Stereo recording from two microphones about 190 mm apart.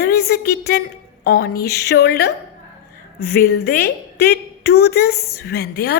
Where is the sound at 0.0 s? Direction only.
55° left (ahead or behind).